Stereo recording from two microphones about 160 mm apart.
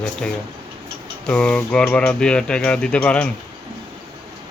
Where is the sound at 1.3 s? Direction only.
5° left (ahead or behind).